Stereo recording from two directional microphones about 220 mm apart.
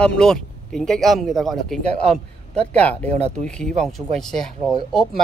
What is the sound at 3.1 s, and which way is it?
Speech, 30° right (ahead or behind).